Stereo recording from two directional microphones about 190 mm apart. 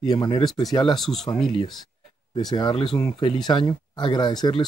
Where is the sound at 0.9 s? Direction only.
Centre (ahead or behind).